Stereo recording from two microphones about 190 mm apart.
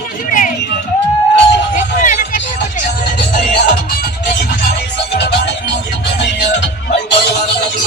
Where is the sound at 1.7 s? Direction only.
40° left (ahead or behind).